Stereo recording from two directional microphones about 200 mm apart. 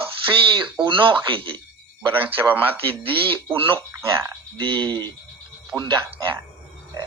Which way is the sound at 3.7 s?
10° right (ahead or behind).